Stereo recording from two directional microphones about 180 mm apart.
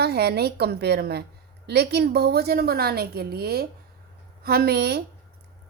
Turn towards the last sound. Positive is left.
turn(degrees=-65)  # may be behind; listen again after turning